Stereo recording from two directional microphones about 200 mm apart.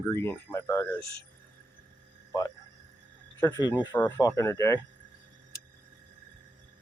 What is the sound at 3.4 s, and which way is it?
Speech, 20° left (ahead or behind).